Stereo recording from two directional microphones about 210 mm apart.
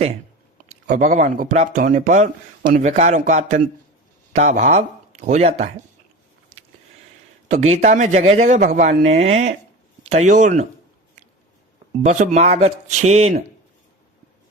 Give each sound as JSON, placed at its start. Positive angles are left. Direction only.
{"t": 0.7, "sound": "speech", "side_deg": -35}
{"t": 7.4, "sound": "speech", "side_deg": -30}
{"t": 12.0, "sound": "speech", "side_deg": -35}